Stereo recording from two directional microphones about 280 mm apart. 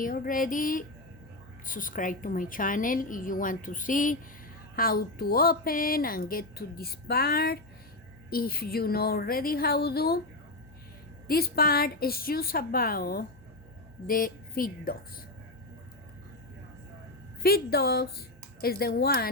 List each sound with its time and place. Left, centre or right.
0.0 s a woman's voice: left
11.3 s speech: left
17.4 s a woman's voice: left